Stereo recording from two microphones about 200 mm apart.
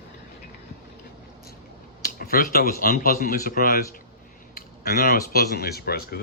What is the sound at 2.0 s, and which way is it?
Speech, 45° left (ahead or behind).